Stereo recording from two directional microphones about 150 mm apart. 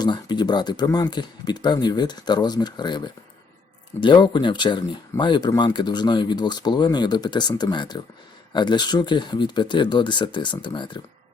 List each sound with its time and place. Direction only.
0.0 s speech: 30° left (ahead or behind)